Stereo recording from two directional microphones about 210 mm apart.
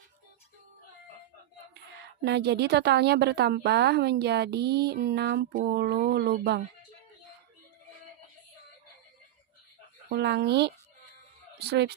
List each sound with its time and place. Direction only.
2.2 s a woman's voice: 50° right (ahead or behind)
10.1 s a woman's voice: 55° right (ahead or behind)